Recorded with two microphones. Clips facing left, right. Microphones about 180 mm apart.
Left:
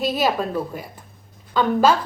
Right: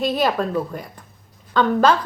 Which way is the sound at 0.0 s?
5° left (ahead or behind).